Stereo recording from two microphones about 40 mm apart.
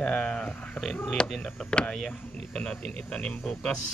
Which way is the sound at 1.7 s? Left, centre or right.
Left.